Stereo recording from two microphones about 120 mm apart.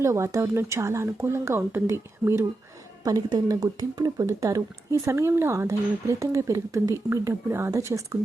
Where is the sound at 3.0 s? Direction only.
35° right (ahead or behind).